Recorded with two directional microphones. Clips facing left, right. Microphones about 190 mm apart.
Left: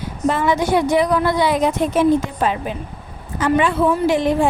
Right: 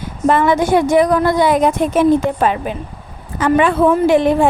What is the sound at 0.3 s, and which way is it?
A woman's voice, 55° right (ahead or behind).